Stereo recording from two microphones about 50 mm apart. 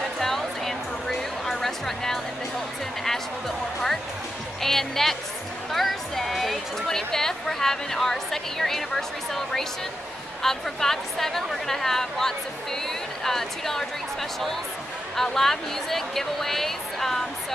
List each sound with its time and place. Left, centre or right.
0.2 s music: centre
3.0 s speech: centre
15.1 s a woman's voice: centre